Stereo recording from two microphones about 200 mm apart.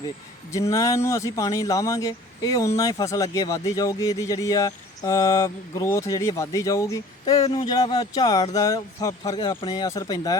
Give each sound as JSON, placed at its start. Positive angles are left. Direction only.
{"t": 0.5, "sound": "speech", "side_deg": 15}